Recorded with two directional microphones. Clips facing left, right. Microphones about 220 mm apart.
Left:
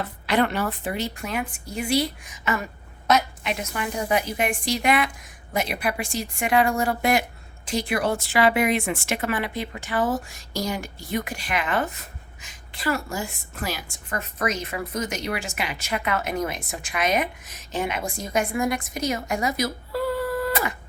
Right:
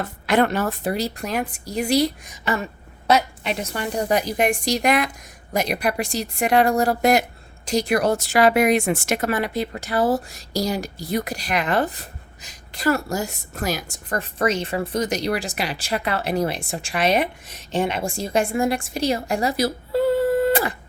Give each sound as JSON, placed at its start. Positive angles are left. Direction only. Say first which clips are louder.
{"t": 0.0, "sound": "speech", "louder": "right 3 dB", "side_deg": -45}